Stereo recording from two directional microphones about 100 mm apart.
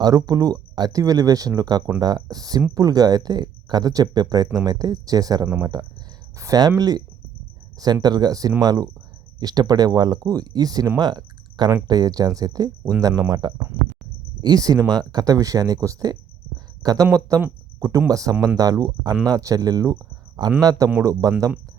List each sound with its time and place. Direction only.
0.0 s speech: 40° right (ahead or behind)
8.0 s speech: 45° right (ahead or behind)